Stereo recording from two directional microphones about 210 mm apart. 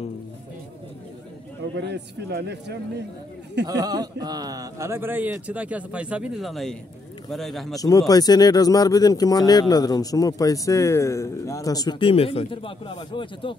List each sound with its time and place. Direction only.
1.8 s speech: 55° right (ahead or behind)
3.6 s a man's voice: 20° right (ahead or behind); by 7.7 s centre (ahead or behind)
7.7 s speech: 15° left (ahead or behind)